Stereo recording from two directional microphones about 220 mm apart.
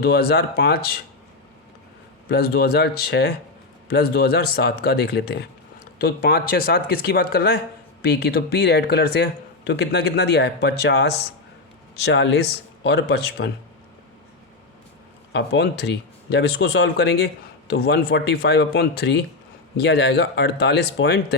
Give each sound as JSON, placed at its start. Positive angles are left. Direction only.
{"t": 0.0, "sound": "speech", "side_deg": 45}
{"t": 2.3, "sound": "speech", "side_deg": 45}
{"t": 15.3, "sound": "speech", "side_deg": 50}